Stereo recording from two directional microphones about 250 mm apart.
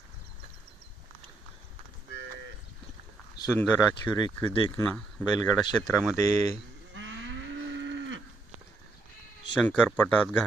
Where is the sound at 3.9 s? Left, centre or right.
Centre.